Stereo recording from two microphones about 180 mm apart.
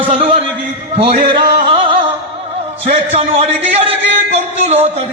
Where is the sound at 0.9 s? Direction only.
35° right (ahead or behind).